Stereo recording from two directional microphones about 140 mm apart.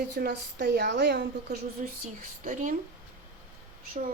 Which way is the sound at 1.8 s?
65° right (ahead or behind).